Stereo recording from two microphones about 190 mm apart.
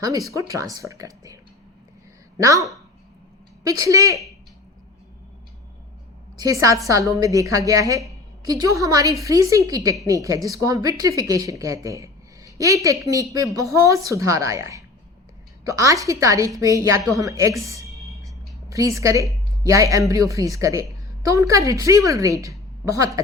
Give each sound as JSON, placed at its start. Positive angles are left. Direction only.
{"t": 0.3, "sound": "a woman's voice", "side_deg": -15}
{"t": 3.7, "sound": "a woman's voice", "side_deg": -15}
{"t": 6.3, "sound": "a woman's voice", "side_deg": -20}
{"t": 18.7, "sound": "a woman's voice", "side_deg": -15}